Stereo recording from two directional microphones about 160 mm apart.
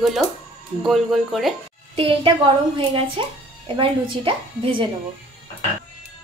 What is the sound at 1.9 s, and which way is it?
A woman's voice, 35° right (ahead or behind).